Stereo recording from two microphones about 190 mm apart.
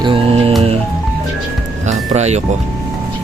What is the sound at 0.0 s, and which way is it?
Music, 30° right (ahead or behind).